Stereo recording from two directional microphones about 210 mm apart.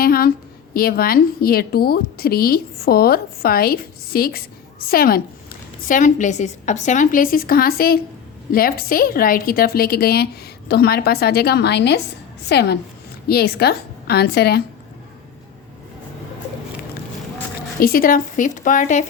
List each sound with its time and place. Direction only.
0.0 s a woman's voice: 45° left (ahead or behind)
17.7 s a woman's voice: 45° left (ahead or behind)